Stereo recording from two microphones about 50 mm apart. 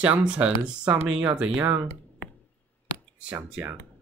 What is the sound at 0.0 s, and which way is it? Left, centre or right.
Speech, right.